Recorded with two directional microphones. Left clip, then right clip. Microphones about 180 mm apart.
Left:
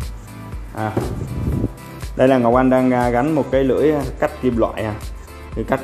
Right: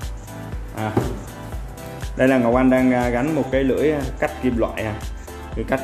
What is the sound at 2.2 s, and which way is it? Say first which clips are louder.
Speech: left 3 dB; 30° left (ahead or behind).